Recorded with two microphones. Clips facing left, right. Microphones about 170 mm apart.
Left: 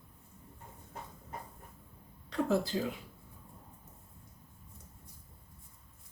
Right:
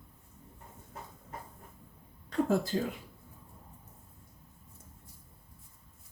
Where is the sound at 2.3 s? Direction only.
50° right (ahead or behind).